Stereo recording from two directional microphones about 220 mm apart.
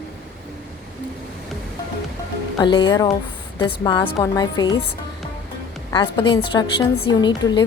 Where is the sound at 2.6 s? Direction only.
20° left (ahead or behind).